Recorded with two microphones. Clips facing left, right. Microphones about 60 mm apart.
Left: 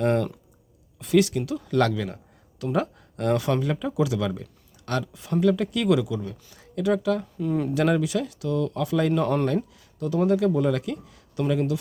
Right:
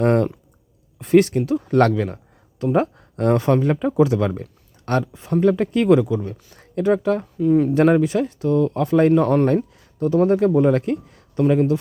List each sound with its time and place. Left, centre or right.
0.0 s speech: right
7.3 s speech: centre
7.7 s speech: right
9.7 s a sound: right
10.2 s speech: right